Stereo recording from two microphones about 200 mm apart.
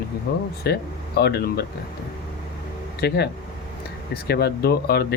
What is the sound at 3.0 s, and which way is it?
Speech, 55° left (ahead or behind).